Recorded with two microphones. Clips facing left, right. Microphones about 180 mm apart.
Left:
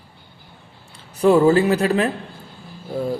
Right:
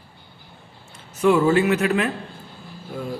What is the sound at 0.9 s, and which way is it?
Speech, 35° left (ahead or behind).